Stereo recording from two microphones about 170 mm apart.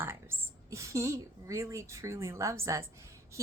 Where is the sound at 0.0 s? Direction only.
15° right (ahead or behind).